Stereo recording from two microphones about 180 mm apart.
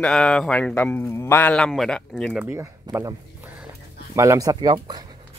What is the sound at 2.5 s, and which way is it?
Speech, 15° right (ahead or behind).